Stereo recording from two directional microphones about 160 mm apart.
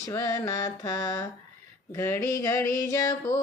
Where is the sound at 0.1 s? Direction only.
20° left (ahead or behind).